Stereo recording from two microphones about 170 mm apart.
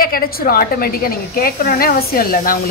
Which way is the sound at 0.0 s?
60° left (ahead or behind).